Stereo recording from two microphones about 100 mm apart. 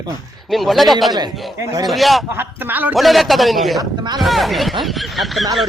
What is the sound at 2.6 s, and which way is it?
Speech, 20° right (ahead or behind).